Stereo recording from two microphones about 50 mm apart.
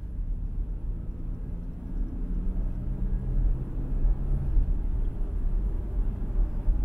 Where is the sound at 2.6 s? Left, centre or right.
Centre.